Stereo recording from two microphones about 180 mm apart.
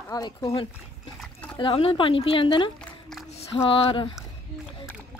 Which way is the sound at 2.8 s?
Centre (ahead or behind).